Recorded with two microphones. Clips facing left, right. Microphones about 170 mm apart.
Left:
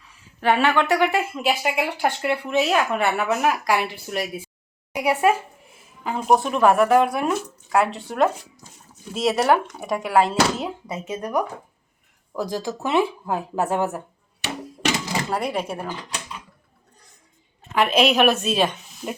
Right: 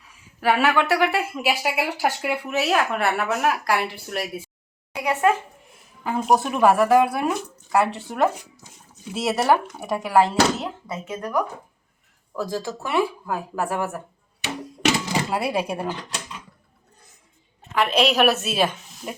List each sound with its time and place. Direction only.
0.3 s speech: 5° right (ahead or behind)
4.9 s a woman's voice: 10° left (ahead or behind)
6.0 s speech: centre (ahead or behind)
10.6 s speech: 20° left (ahead or behind)
15.3 s speech: 10° right (ahead or behind)
17.7 s speech: centre (ahead or behind)